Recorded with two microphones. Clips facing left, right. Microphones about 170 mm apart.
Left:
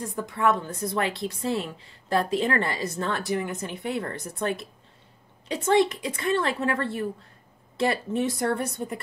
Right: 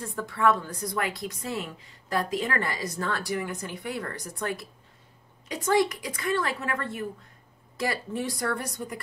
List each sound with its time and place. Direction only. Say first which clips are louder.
0.0 s a woman's voice: even; 20° left (ahead or behind)